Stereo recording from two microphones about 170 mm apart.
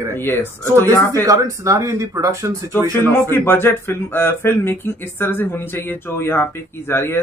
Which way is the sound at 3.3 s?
15° left (ahead or behind).